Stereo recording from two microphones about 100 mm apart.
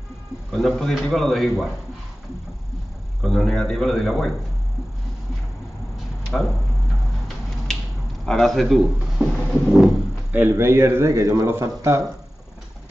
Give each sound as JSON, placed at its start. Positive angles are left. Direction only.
{"t": 0.5, "sound": "speech", "side_deg": 0}
{"t": 3.2, "sound": "speech", "side_deg": 5}
{"t": 6.3, "sound": "speech", "side_deg": 5}
{"t": 8.3, "sound": "speech", "side_deg": 0}
{"t": 10.5, "sound": "a man's voice", "side_deg": -25}